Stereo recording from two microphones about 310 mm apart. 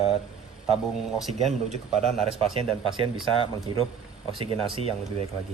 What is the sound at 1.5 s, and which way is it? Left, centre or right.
A man's voice, right.